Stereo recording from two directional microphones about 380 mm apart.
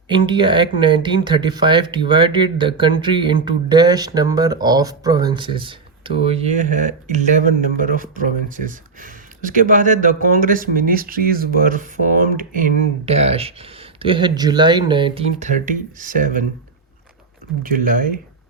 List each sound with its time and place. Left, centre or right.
0.1 s speech: centre
17.6 s speech: right